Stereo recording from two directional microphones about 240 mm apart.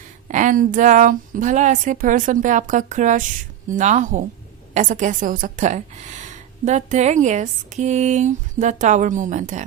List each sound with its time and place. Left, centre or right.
0.3 s a woman's voice: right